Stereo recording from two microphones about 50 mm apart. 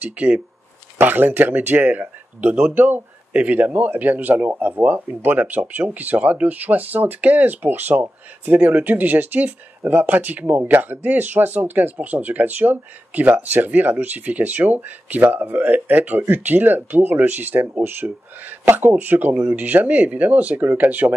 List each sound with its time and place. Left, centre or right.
0.0 s speech: right
0.9 s speech: right